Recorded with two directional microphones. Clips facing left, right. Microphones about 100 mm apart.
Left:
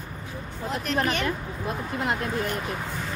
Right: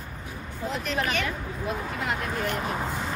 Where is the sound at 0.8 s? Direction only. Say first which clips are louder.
Left 3 dB; 40° left (ahead or behind).